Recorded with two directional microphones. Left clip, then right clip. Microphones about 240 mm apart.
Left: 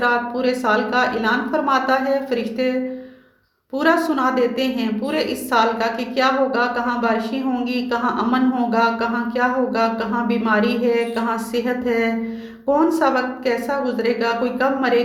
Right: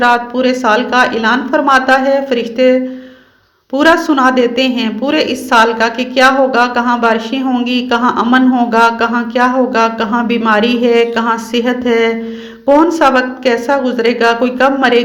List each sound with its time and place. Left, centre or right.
0.0 s a woman's voice: centre
3.8 s a woman's voice: right